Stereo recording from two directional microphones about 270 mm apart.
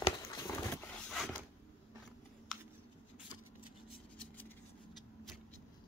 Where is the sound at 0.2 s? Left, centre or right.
Centre.